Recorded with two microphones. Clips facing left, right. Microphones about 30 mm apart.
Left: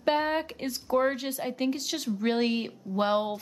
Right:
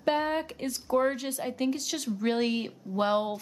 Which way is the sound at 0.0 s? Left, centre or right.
Centre.